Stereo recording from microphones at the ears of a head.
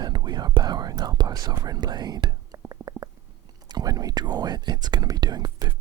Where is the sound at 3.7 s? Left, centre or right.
Right.